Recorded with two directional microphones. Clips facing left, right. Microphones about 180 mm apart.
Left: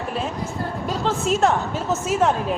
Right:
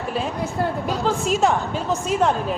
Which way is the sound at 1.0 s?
Centre (ahead or behind).